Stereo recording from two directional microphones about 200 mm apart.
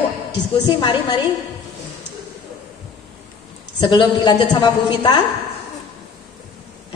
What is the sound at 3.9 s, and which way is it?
A woman's voice, 20° left (ahead or behind).